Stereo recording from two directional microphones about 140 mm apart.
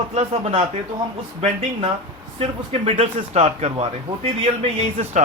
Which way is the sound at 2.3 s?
45° right (ahead or behind).